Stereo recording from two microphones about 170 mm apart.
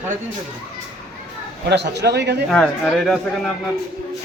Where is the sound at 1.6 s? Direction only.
90° right.